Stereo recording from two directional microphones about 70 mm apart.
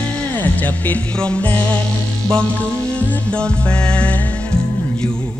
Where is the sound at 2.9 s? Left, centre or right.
Centre.